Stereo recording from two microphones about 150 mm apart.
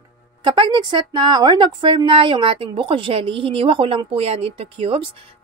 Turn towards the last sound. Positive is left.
turn(degrees=-40)  # may be behind; listen again after turning